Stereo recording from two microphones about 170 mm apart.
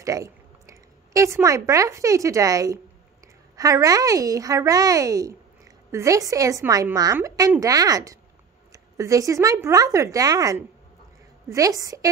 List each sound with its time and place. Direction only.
0.0 s a woman's voice: 20° right (ahead or behind)